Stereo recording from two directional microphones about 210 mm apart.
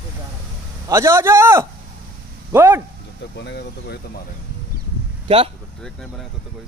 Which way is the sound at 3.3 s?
55° left (ahead or behind).